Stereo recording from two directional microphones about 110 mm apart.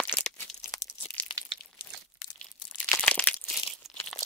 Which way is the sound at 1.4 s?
30° right (ahead or behind).